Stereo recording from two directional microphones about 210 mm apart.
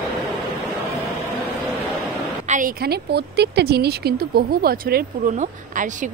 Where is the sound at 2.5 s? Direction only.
40° right (ahead or behind).